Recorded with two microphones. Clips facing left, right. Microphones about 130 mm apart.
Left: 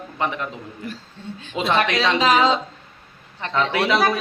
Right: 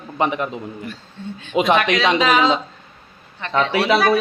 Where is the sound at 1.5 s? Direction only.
15° right (ahead or behind).